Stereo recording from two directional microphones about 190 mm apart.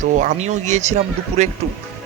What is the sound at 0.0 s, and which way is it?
Speech, 40° right (ahead or behind).